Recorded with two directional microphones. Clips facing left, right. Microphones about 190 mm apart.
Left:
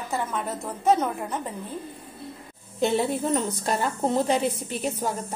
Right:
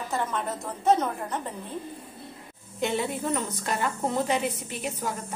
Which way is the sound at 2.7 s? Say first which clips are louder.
Left 4 dB; 35° left (ahead or behind).